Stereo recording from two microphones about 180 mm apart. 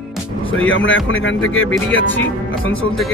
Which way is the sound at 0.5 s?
90° left.